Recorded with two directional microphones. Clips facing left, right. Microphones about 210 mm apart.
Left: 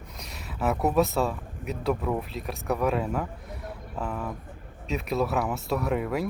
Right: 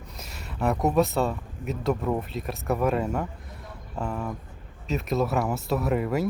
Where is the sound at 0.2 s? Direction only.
Centre (ahead or behind).